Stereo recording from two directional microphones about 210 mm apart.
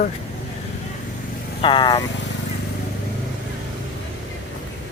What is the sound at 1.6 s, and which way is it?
Speech, 20° left (ahead or behind).